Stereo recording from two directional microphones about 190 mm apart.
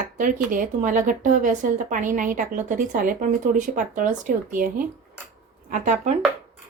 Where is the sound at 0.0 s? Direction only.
45° right (ahead or behind).